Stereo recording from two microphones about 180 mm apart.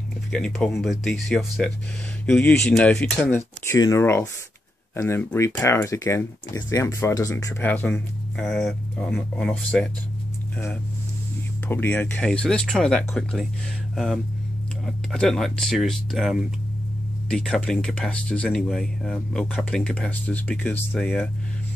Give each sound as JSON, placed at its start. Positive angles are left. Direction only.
{"t": 0.3, "sound": "speech", "side_deg": 5}
{"t": 11.6, "sound": "speech", "side_deg": 10}